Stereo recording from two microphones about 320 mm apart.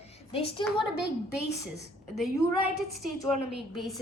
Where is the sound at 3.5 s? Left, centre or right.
Centre.